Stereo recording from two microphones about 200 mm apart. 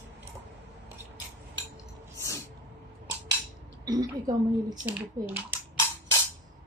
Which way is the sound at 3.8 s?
20° right (ahead or behind).